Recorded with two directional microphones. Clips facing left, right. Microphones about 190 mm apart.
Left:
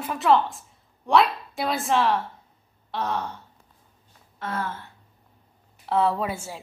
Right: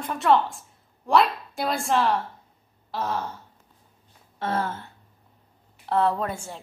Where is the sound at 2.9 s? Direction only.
Centre (ahead or behind).